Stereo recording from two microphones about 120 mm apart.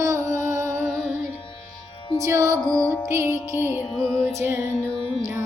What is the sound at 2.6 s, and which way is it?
Music, 10° left (ahead or behind).